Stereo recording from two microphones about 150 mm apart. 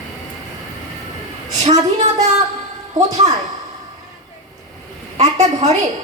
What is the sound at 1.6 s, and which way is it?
Speech, 50° right (ahead or behind).